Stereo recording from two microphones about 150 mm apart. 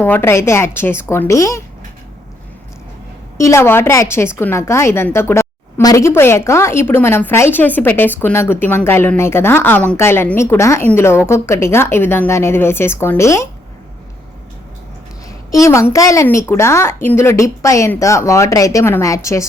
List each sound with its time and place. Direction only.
0.0 s a woman's voice: 15° left (ahead or behind)
3.3 s a woman's voice: 20° left (ahead or behind)
15.5 s a woman's voice: 20° left (ahead or behind)